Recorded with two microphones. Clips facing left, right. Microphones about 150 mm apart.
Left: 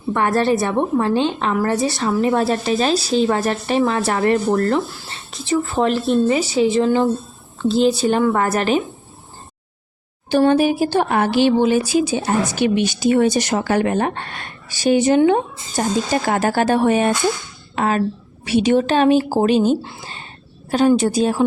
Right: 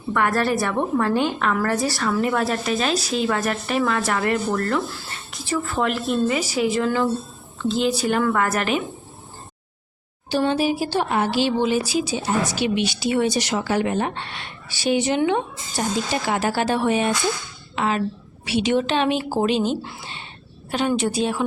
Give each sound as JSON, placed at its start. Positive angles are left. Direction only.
{"t": 0.1, "sound": "a woman's voice", "side_deg": 30}
{"t": 7.6, "sound": "speech", "side_deg": 35}
{"t": 10.2, "sound": "speech", "side_deg": 50}